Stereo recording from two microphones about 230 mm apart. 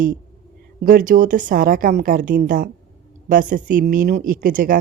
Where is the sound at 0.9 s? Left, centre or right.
Right.